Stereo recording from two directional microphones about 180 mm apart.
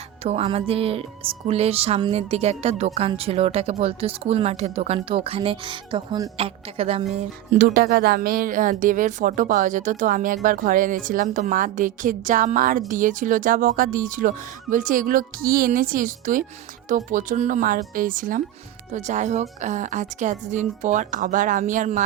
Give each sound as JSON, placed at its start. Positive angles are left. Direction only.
{"t": 0.2, "sound": "speech", "side_deg": -35}
{"t": 7.6, "sound": "a woman's voice", "side_deg": -60}